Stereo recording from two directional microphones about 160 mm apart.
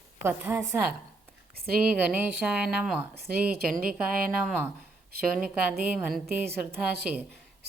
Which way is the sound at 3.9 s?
5° right (ahead or behind).